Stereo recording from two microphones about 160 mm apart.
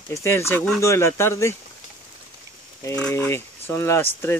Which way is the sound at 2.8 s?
10° left (ahead or behind).